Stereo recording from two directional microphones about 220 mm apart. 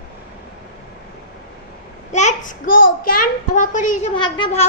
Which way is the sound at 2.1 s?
35° left (ahead or behind).